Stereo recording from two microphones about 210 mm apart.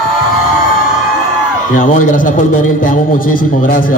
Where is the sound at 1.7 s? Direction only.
40° left (ahead or behind).